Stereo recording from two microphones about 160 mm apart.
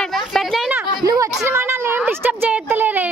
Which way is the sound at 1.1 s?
20° right (ahead or behind).